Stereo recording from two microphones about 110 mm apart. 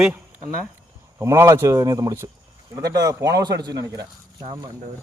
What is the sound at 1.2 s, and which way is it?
Speech, 25° right (ahead or behind).